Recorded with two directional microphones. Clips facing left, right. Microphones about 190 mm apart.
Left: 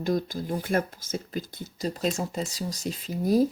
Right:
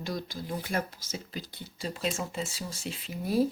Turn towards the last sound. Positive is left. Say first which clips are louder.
# left 5 dB
turn(degrees=40)  # may be behind; listen again after turning